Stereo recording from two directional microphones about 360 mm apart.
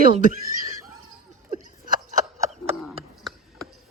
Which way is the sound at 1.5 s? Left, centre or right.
Right.